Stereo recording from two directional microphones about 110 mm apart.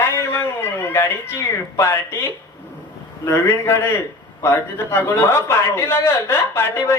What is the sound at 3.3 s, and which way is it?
A man's voice, 25° left (ahead or behind).